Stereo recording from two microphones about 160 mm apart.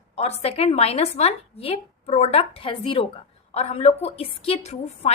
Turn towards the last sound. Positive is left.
turn(degrees=40)  # may be behind; listen again after turning